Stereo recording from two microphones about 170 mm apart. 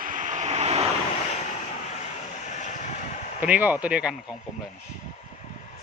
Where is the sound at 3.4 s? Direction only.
10° right (ahead or behind).